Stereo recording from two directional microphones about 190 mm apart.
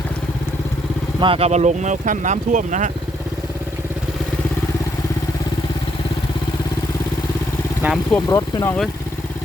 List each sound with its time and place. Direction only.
1.2 s speech: 30° right (ahead or behind)
7.8 s speech: 10° right (ahead or behind)
8.3 s speech: 15° left (ahead or behind)